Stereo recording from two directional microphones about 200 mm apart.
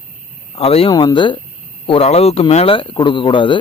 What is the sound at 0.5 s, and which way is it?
Speech, 30° left (ahead or behind).